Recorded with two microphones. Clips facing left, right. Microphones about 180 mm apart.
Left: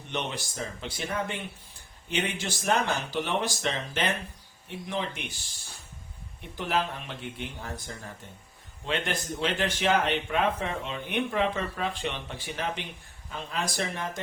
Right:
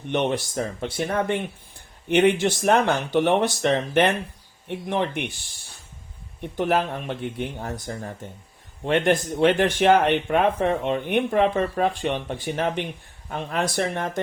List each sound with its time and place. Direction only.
0.1 s speech: 55° right (ahead or behind)
6.4 s speech: 55° right (ahead or behind)
8.8 s speech: 60° right (ahead or behind)